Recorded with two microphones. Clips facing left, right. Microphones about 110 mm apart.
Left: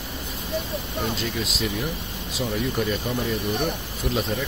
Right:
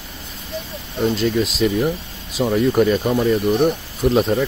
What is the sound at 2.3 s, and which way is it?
Speech, 55° right (ahead or behind).